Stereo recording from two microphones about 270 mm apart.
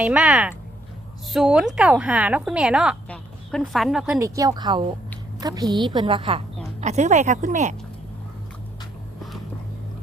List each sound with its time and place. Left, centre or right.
0.0 s a woman's voice: centre
4.4 s a woman's voice: centre